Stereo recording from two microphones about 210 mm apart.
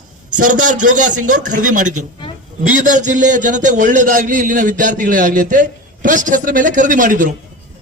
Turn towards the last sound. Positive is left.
turn(degrees=-40)  # may be behind; listen again after turning